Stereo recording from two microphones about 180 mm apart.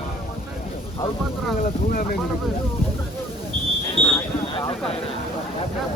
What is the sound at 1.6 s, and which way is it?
Speech, 50° left (ahead or behind).